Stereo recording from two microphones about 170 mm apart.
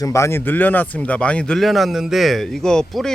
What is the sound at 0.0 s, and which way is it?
Speech, 15° left (ahead or behind).